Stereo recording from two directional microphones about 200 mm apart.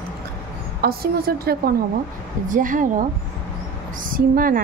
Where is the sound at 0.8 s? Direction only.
50° right (ahead or behind).